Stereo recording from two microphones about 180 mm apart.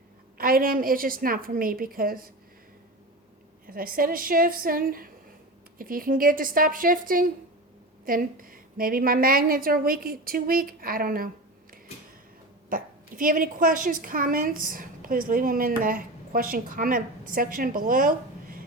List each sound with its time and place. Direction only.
0.3 s a woman's voice: 55° right (ahead or behind)
3.7 s a woman's voice: 55° right (ahead or behind)
12.7 s a woman's voice: 50° right (ahead or behind)